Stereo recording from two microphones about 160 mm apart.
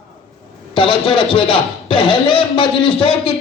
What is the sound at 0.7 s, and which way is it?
A man's voice, 35° left (ahead or behind).